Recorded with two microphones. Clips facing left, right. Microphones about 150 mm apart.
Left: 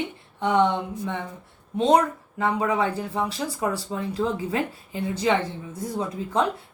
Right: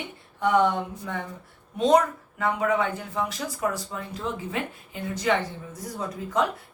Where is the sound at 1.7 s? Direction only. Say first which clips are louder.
Left 1 dB; 30° left (ahead or behind).